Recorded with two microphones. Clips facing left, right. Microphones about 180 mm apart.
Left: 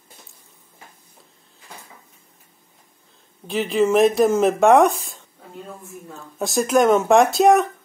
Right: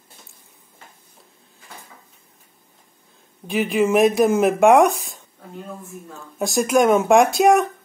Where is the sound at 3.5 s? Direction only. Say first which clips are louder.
Even; 5° right (ahead or behind).